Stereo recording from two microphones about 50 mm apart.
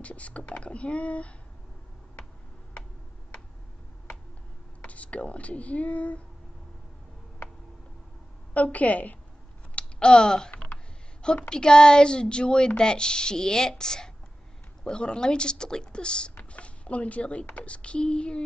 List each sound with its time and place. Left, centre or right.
0.0 s speech: left
4.8 s speech: left
8.7 s speech: left
9.8 s a sound: centre
11.3 s a woman's voice: centre